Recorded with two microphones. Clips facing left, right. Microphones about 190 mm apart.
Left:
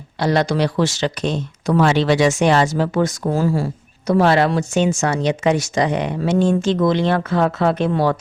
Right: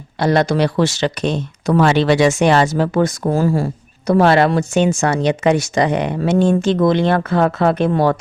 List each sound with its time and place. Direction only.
0.2 s speech: 55° right (ahead or behind)